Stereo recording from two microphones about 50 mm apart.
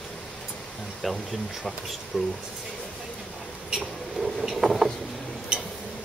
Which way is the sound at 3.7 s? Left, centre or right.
Centre.